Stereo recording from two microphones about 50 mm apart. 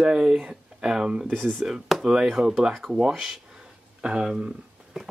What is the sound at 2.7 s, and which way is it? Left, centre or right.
Dishes, centre.